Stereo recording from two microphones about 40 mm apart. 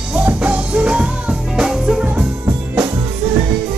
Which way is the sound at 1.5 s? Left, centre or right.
Centre.